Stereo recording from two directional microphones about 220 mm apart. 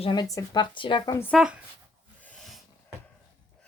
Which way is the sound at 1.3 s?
5° right (ahead or behind).